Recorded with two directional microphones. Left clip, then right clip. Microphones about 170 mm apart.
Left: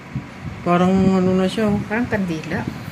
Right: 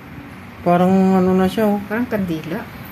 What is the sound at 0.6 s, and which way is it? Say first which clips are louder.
Speech: right 2 dB; 55° right (ahead or behind).